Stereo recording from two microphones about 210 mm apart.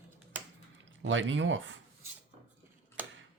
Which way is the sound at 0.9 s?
65° right (ahead or behind).